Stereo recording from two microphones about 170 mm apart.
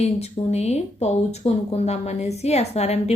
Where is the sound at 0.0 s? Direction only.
40° left (ahead or behind).